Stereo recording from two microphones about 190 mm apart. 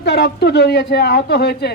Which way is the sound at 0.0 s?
60° left (ahead or behind).